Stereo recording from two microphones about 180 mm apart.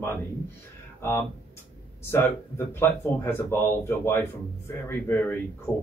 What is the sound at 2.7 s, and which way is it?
Speech, 15° left (ahead or behind).